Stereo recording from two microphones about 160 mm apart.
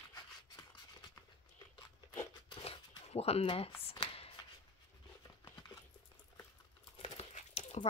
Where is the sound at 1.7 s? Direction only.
20° left (ahead or behind).